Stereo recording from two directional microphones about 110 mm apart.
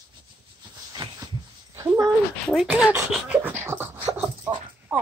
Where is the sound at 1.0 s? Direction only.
50° right (ahead or behind).